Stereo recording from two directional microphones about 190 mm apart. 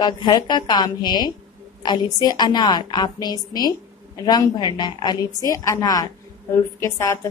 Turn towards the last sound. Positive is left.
turn(degrees=15)  # may be behind; listen again after turning